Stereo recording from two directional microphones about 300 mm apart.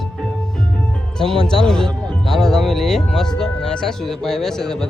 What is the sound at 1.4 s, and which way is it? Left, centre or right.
Speech, centre.